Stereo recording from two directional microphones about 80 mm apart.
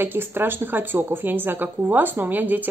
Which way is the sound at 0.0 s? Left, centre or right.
Right.